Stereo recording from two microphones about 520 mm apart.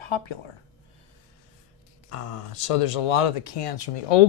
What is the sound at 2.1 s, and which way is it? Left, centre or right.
Speech, left.